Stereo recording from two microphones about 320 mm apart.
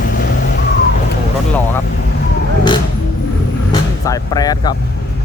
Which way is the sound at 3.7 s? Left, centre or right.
Centre.